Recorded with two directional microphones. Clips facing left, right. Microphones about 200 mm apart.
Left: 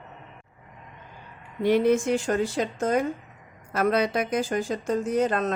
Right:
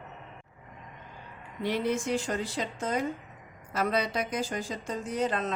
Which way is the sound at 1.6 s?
55° left (ahead or behind).